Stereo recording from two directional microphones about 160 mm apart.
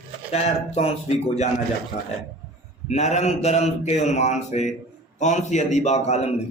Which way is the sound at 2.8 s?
45° left (ahead or behind).